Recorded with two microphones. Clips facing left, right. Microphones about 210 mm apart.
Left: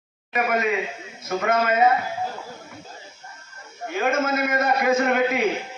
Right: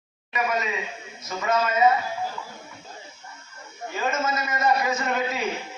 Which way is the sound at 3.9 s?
55° left (ahead or behind).